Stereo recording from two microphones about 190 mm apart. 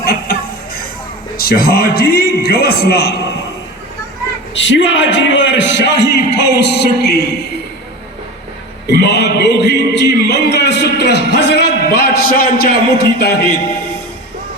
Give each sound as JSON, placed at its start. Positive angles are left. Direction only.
{"t": 0.0, "sound": "music", "side_deg": 55}
{"t": 1.4, "sound": "a man's voice", "side_deg": 55}
{"t": 4.5, "sound": "a man's voice", "side_deg": 70}
{"t": 8.9, "sound": "a man's voice", "side_deg": 60}